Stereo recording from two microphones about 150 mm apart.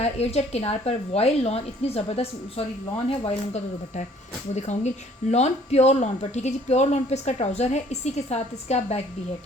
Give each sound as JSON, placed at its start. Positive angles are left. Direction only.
{"t": 0.0, "sound": "speech", "side_deg": 45}